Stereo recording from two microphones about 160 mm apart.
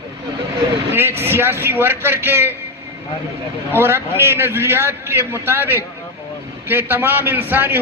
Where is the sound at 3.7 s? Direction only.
15° right (ahead or behind).